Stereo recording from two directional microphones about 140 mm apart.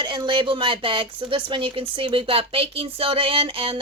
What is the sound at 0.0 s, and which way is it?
Speech, 35° right (ahead or behind).